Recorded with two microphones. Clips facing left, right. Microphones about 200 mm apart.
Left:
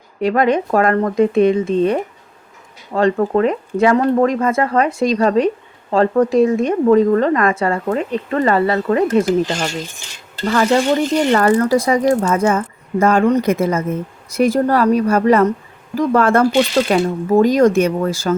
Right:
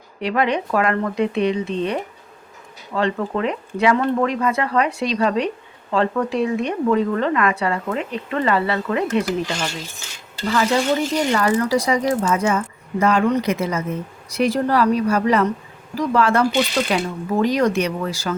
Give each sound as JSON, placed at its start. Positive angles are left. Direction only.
{"t": 0.2, "sound": "a woman's voice", "side_deg": 45}